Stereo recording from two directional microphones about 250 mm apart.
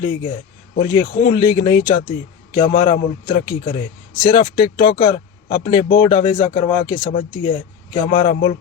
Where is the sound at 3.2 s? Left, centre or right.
Centre.